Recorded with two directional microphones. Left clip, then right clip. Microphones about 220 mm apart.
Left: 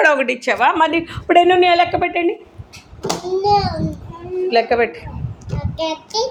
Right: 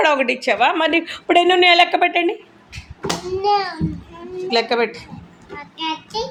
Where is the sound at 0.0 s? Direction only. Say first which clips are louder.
Left 2 dB; 15° right (ahead or behind).